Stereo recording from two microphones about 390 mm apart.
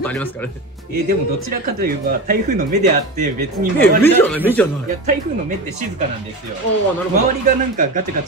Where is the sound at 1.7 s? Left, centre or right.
Right.